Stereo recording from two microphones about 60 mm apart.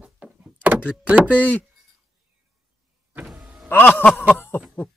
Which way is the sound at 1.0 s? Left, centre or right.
Right.